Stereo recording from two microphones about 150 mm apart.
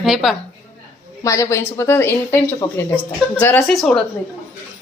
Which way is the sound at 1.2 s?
20° left (ahead or behind).